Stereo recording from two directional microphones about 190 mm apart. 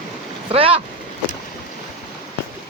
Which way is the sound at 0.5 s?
30° right (ahead or behind).